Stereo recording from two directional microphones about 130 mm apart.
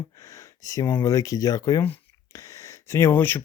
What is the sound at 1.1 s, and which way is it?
Speech, 25° left (ahead or behind).